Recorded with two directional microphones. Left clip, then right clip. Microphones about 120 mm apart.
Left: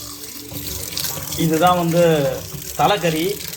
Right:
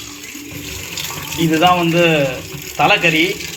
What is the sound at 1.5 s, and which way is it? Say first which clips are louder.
Speech: right 3 dB; centre (ahead or behind).